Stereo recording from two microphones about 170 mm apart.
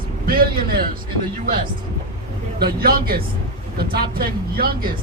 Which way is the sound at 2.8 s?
60° right (ahead or behind).